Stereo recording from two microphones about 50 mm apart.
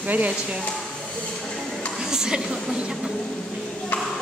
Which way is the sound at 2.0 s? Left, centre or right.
Centre.